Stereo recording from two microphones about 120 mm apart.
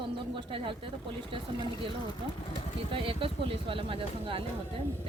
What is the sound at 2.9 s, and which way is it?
Speech, 50° right (ahead or behind).